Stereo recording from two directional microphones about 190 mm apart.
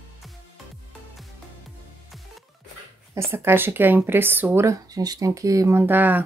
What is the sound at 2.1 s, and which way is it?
Music, centre (ahead or behind).